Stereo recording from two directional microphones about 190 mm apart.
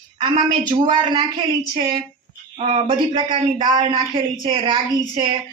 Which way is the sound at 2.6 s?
30° right (ahead or behind).